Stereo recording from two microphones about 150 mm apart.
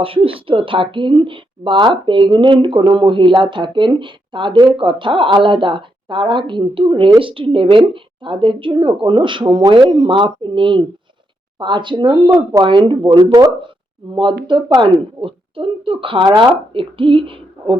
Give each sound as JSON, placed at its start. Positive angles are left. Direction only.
{"t": 0.0, "sound": "speech", "side_deg": -35}